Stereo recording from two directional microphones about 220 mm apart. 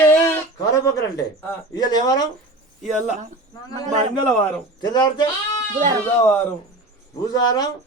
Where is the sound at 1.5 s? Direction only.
15° left (ahead or behind).